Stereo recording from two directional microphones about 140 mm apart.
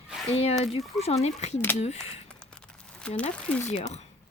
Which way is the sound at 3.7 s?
50° left (ahead or behind).